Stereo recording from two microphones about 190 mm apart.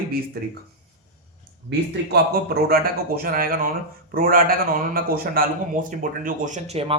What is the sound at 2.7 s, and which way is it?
A man's voice, 50° right (ahead or behind).